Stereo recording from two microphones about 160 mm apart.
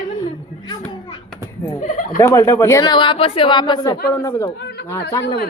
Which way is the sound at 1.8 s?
55° left (ahead or behind).